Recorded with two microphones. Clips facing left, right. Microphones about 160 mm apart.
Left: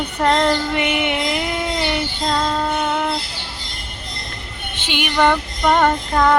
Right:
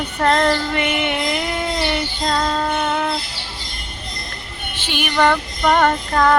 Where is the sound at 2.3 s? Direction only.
5° left (ahead or behind).